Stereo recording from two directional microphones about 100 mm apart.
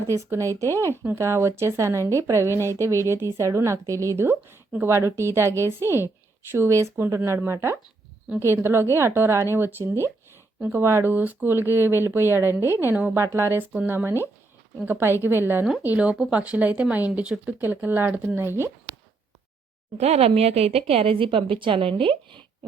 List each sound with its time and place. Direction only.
0.1 s speech: 30° right (ahead or behind)
20.0 s a woman's voice: 90° right; by 22.4 s 60° right (ahead or behind)